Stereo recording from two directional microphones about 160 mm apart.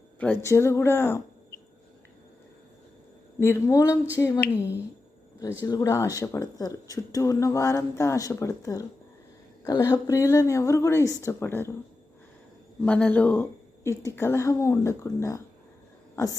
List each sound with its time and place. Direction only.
0.2 s a woman's voice: 15° left (ahead or behind)
3.4 s a woman's voice: 15° left (ahead or behind)
4.5 s speech: 10° right (ahead or behind)
5.4 s speech: 25° left (ahead or behind)
12.8 s a woman's voice: 10° left (ahead or behind)